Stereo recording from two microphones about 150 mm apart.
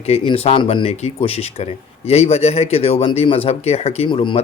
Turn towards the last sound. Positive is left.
turn(degrees=35)  # may be behind; listen again after turning